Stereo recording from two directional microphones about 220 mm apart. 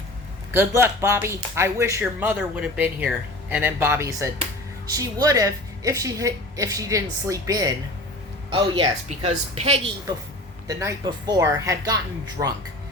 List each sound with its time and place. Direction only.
0.5 s a woman's voice: 10° right (ahead or behind); by 9.8 s 25° right (ahead or behind)
10.7 s a woman's voice: 15° right (ahead or behind)
12.4 s speech: 30° right (ahead or behind)